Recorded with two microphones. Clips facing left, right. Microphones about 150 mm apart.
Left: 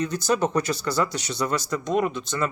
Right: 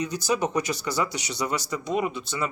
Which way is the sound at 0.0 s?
15° right (ahead or behind).